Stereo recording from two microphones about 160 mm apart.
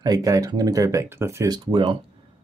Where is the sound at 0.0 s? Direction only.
20° right (ahead or behind).